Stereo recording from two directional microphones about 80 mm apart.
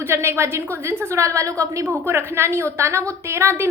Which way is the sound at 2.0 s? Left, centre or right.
Right.